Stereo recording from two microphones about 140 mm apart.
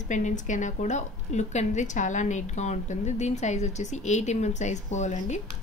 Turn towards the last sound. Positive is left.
turn(degrees=60)  # may be behind; listen again after turning